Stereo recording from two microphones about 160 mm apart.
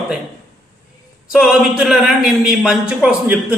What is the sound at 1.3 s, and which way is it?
A man's voice, 5° right (ahead or behind).